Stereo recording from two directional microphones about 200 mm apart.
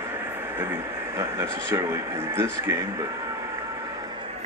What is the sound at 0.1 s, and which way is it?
Speech, 10° right (ahead or behind).